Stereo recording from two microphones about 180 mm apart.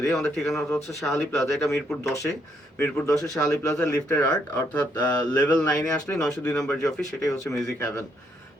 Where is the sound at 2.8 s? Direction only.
10° left (ahead or behind).